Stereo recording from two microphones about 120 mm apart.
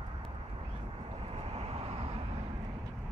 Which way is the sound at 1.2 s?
55° right (ahead or behind).